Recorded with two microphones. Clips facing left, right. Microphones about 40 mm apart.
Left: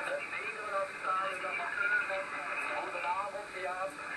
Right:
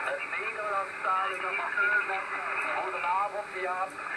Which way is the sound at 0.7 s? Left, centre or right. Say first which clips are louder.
Right 4 dB; right.